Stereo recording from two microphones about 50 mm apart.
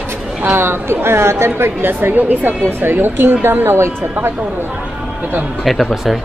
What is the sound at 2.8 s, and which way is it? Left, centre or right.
Speech, right.